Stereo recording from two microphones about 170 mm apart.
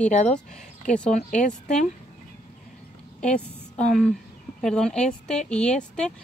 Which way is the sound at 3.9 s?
Centre (ahead or behind).